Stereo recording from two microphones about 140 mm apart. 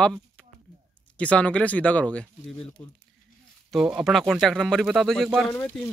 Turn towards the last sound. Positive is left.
turn(degrees=15)  # may be behind; listen again after turning